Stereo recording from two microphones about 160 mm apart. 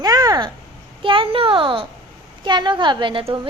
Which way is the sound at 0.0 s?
25° right (ahead or behind).